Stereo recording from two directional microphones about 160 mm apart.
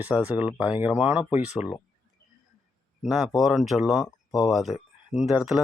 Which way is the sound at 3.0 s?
Centre (ahead or behind).